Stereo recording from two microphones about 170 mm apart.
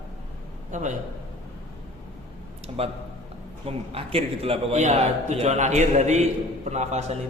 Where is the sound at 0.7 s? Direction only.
45° right (ahead or behind).